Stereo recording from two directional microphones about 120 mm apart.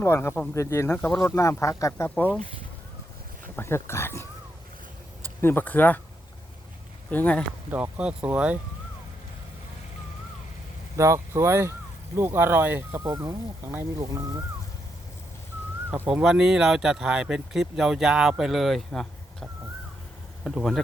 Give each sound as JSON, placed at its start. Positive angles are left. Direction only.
{"t": 0.0, "sound": "speech", "side_deg": 20}
{"t": 1.9, "sound": "speech", "side_deg": 15}
{"t": 3.5, "sound": "speech", "side_deg": 20}
{"t": 5.4, "sound": "speech", "side_deg": 15}
{"t": 7.1, "sound": "speech", "side_deg": 15}
{"t": 7.7, "sound": "speech", "side_deg": -10}
{"t": 10.9, "sound": "speech", "side_deg": -25}
{"t": 15.9, "sound": "speech", "side_deg": -15}